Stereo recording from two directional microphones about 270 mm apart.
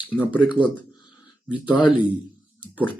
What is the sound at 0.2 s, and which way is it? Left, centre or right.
Speech, centre.